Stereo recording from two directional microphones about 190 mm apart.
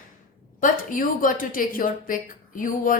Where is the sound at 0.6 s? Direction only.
45° left (ahead or behind).